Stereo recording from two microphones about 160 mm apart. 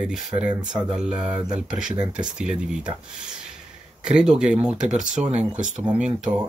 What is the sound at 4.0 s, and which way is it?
Speech, 5° right (ahead or behind).